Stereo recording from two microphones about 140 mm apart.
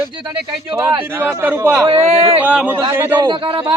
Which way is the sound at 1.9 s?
45° right (ahead or behind).